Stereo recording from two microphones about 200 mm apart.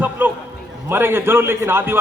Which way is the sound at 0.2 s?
10° right (ahead or behind).